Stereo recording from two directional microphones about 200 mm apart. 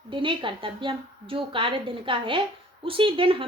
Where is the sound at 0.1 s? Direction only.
25° right (ahead or behind).